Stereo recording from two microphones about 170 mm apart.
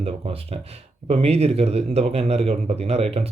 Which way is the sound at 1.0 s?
35° right (ahead or behind).